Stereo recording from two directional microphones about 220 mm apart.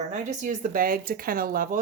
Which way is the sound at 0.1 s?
35° right (ahead or behind).